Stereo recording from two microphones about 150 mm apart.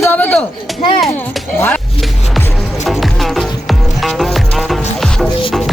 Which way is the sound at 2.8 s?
Centre (ahead or behind).